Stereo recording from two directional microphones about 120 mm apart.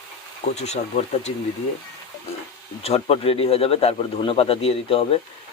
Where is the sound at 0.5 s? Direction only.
65° left (ahead or behind).